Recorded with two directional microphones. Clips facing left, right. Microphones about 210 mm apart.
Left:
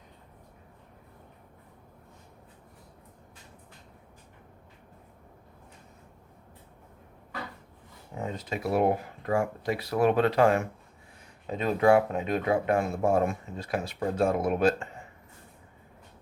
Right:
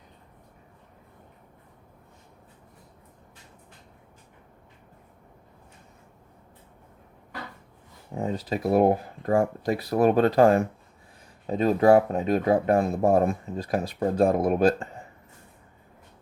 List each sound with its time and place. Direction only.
8.1 s speech: 30° right (ahead or behind)